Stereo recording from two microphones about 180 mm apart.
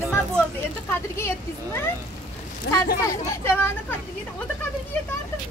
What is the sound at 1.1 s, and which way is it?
Speech, 15° left (ahead or behind).